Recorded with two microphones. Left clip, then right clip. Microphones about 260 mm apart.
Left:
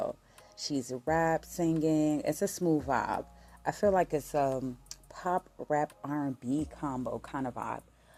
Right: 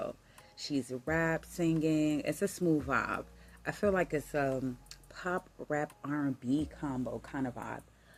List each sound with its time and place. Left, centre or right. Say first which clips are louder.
0.7 s speech: left 3 dB; centre